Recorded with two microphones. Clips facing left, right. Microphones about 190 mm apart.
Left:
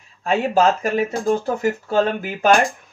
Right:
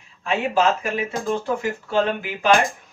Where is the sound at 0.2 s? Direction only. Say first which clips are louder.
Left 3 dB; 40° left (ahead or behind).